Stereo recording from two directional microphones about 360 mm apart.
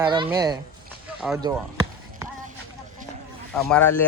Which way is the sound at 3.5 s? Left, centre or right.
Centre.